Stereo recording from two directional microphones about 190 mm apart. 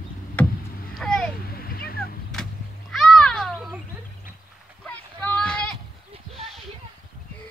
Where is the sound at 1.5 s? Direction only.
50° left (ahead or behind).